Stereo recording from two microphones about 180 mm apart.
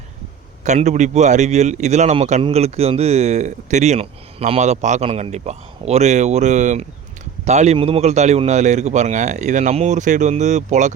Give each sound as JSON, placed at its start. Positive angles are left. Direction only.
{"t": 0.6, "sound": "a man's voice", "side_deg": -40}